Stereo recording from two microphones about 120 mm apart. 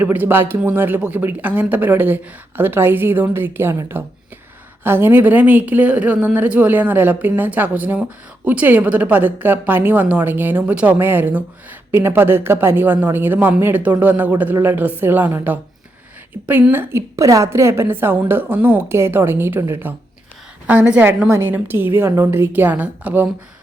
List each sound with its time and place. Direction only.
0.0 s a woman's voice: 15° right (ahead or behind)